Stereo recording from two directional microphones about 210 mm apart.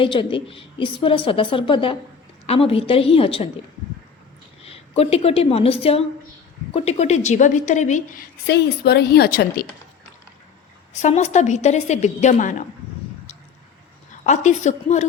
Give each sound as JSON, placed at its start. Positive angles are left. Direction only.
{"t": 0.0, "sound": "a woman's voice", "side_deg": 25}
{"t": 4.6, "sound": "a woman's voice", "side_deg": 30}
{"t": 8.4, "sound": "a woman's voice", "side_deg": 50}
{"t": 11.0, "sound": "a woman's voice", "side_deg": 35}
{"t": 14.3, "sound": "a woman's voice", "side_deg": 35}